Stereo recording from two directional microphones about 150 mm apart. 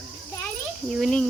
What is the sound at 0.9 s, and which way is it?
Speech, centre (ahead or behind).